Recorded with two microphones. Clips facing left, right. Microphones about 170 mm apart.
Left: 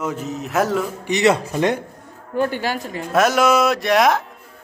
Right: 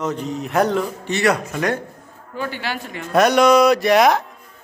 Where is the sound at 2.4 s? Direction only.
50° left (ahead or behind).